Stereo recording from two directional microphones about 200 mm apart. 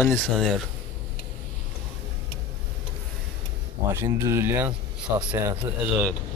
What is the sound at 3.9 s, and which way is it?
Speech, 15° right (ahead or behind).